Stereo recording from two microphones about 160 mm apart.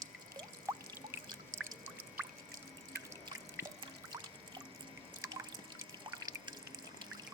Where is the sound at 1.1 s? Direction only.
15° right (ahead or behind).